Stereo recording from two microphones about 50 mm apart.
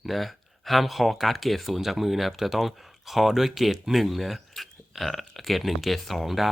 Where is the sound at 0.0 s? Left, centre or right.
Centre.